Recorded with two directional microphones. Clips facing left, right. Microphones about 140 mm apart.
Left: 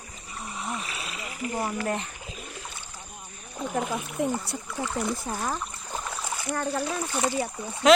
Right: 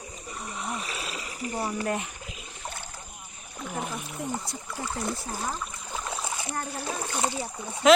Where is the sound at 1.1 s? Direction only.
35° right (ahead or behind).